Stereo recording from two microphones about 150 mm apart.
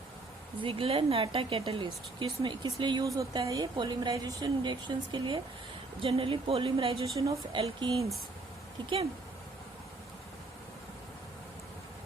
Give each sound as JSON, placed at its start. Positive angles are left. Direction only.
{"t": 0.6, "sound": "speech", "side_deg": -35}